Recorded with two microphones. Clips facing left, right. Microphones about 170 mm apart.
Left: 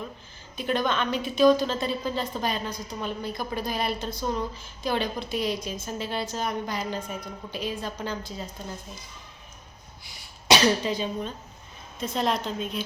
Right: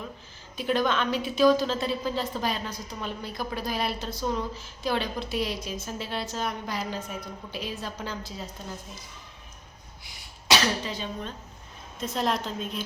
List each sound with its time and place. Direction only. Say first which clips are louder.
0.5 s a woman's voice: right 1 dB; 5° right (ahead or behind)
10.5 s speech: left 5 dB; 15° left (ahead or behind)
11.9 s a woman's voice: left 1 dB; centre (ahead or behind)